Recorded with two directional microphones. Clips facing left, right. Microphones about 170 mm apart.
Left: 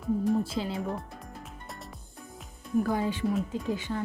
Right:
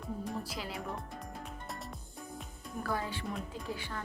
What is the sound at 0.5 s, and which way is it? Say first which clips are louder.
Speech: left 9 dB; 25° left (ahead or behind).